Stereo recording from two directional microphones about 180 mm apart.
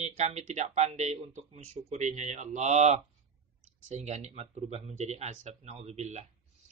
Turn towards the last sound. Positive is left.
turn(degrees=-40)  # may be behind; listen again after turning